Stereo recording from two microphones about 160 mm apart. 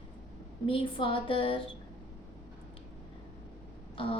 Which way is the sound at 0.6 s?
35° left (ahead or behind).